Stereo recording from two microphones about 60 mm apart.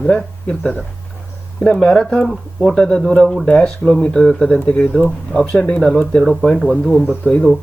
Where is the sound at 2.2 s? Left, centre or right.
Centre.